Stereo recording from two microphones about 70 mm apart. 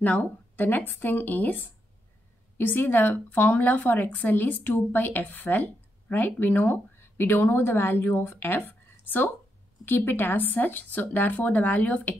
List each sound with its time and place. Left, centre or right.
0.0 s a woman's voice: left